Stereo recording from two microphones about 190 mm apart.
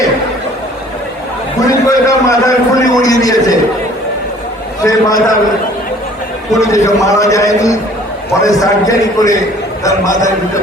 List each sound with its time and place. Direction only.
1.5 s a man's voice: 15° left (ahead or behind)
4.8 s a man's voice: 15° left (ahead or behind)
6.6 s a man's voice: 15° left (ahead or behind)